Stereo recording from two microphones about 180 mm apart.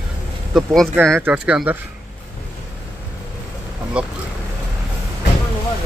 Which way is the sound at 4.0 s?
5° right (ahead or behind).